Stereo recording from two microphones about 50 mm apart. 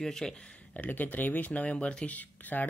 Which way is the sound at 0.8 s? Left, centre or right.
Left.